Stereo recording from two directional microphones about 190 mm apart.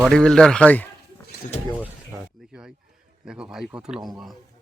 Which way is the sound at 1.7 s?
10° left (ahead or behind).